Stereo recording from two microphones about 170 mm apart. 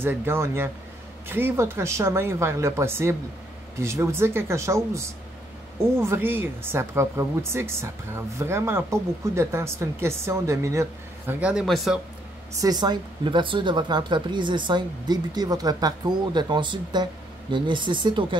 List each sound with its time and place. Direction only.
0.0 s speech: 15° right (ahead or behind)
12.5 s speech: 25° right (ahead or behind)